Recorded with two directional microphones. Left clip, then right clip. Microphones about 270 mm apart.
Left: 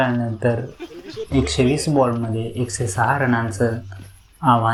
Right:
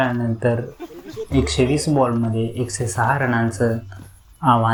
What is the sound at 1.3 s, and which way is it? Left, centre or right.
Speech, centre.